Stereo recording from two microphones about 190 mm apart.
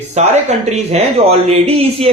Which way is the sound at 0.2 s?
35° right (ahead or behind).